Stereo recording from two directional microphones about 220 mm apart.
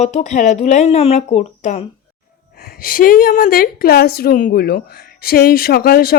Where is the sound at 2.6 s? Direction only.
45° left (ahead or behind).